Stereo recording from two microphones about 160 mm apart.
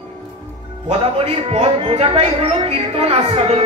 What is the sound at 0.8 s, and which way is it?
Speech, 40° right (ahead or behind).